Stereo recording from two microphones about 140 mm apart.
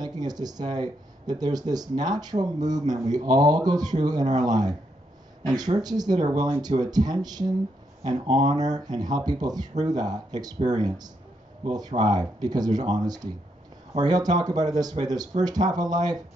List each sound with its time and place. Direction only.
0.0 s speech: 30° right (ahead or behind)